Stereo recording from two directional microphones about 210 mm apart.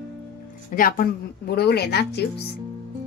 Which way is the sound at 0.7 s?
40° left (ahead or behind).